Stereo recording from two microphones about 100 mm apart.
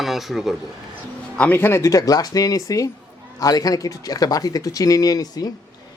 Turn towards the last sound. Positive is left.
turn(degrees=40)  # may be behind; listen again after turning